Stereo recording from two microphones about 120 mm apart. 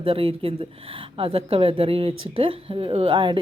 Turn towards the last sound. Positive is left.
turn(degrees=-45)  # may be behind; listen again after turning